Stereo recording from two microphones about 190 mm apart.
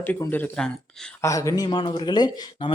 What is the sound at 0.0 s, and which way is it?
Speech, 10° left (ahead or behind).